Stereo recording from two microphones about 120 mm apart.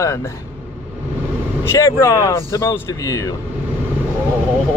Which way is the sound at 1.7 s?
25° left (ahead or behind).